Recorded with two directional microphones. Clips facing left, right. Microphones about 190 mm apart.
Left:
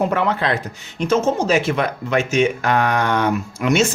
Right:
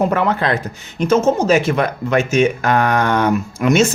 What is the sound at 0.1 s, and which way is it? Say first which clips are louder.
Speech: right 2 dB; 45° right (ahead or behind).